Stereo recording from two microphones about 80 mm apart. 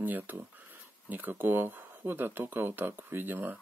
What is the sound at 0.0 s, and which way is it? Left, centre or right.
Speech, right.